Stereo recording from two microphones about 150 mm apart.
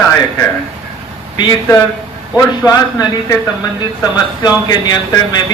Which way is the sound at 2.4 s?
25° left (ahead or behind).